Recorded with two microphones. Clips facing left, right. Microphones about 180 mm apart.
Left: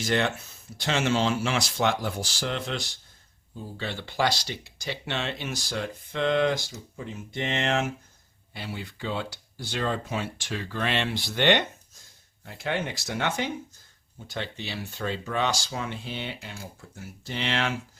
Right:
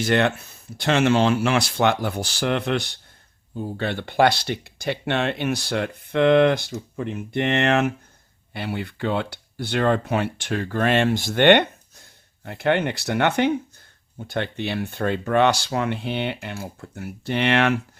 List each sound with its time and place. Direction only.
0.0 s speech: 60° right (ahead or behind)